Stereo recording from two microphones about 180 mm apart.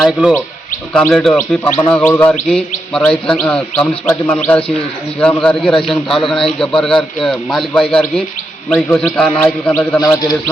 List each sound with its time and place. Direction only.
0.0 s a man's voice: 5° right (ahead or behind); by 10.0 s 10° left (ahead or behind)
10.0 s bird: 20° left (ahead or behind)